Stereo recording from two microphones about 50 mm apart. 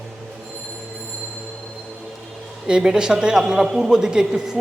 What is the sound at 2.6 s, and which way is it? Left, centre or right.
A man's voice, centre.